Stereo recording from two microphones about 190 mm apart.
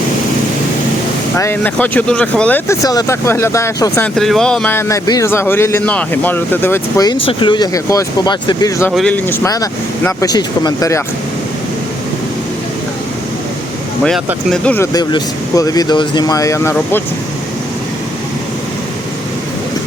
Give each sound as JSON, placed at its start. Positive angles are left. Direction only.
{"t": 1.4, "sound": "a man's voice", "side_deg": 10}
{"t": 2.8, "sound": "a man's voice", "side_deg": 20}
{"t": 4.0, "sound": "a man's voice", "side_deg": 0}
{"t": 9.0, "sound": "a man's voice", "side_deg": 5}
{"t": 14.5, "sound": "a man's voice", "side_deg": 5}
{"t": 14.9, "sound": "speech", "side_deg": 20}